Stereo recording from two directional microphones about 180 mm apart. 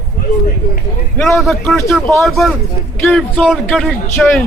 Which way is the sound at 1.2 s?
Centre (ahead or behind).